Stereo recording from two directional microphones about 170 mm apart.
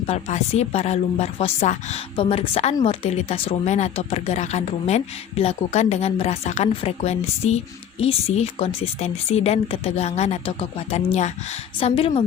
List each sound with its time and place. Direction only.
0.1 s speech: 40° left (ahead or behind)
2.1 s speech: 30° left (ahead or behind)